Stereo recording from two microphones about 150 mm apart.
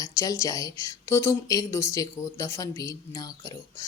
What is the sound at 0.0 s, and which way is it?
Speech, 20° left (ahead or behind).